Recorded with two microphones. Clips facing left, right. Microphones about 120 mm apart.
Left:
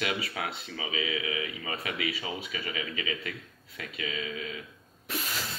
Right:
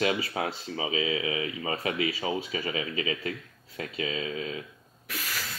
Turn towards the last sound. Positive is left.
turn(degrees=25)  # may be behind; listen again after turning